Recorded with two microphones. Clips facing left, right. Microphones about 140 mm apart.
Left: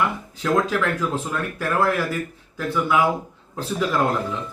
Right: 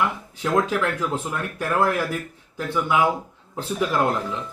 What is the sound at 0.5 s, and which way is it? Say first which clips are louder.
Speech: left 1 dB; 15° right (ahead or behind).